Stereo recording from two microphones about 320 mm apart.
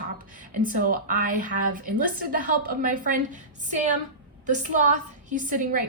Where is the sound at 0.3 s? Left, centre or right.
Right.